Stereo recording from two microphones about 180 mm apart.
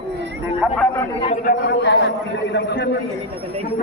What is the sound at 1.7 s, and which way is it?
A man's voice, 70° left (ahead or behind).